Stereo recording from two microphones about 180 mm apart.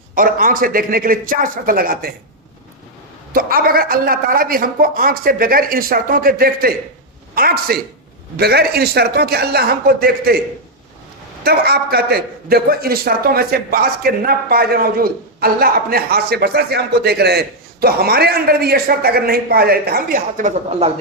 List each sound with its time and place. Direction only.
0.1 s a woman's voice: 50° right (ahead or behind)
3.3 s a woman's voice: 55° right (ahead or behind)
11.4 s a man's voice: 60° right (ahead or behind); by 20.9 s 35° right (ahead or behind)